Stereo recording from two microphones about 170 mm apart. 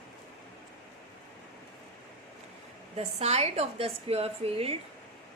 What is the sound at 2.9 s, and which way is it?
A woman's voice, 40° right (ahead or behind).